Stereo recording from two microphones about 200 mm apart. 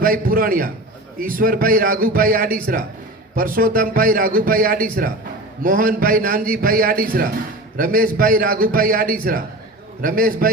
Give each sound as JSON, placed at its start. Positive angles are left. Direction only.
{"t": 0.0, "sound": "a man's voice", "side_deg": -45}